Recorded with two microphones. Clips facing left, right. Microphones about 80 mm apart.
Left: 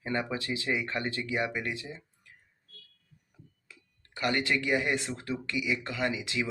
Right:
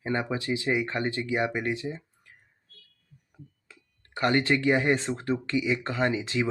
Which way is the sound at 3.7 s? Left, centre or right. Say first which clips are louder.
Right 2 dB; right.